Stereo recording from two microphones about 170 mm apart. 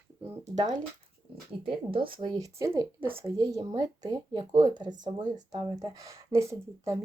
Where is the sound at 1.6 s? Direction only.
30° right (ahead or behind).